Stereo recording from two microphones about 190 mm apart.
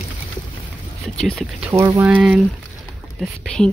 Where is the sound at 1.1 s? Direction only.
5° left (ahead or behind).